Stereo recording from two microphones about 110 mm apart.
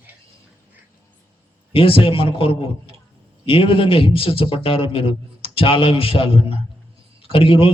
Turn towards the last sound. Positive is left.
turn(degrees=55)  # may be behind; listen again after turning